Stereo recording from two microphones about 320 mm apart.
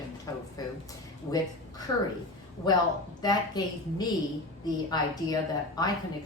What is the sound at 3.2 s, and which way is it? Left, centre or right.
Speech, centre.